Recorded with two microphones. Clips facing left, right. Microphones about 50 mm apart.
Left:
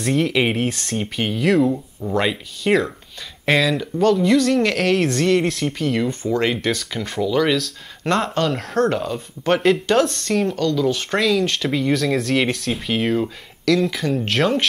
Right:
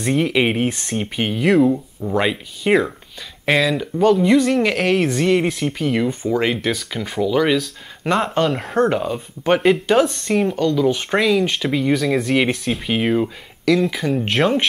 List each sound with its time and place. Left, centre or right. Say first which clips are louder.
0.0 s speech: right 1 dB; centre